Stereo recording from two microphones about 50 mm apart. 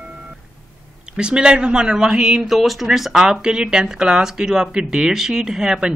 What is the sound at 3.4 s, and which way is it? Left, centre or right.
Speech, centre.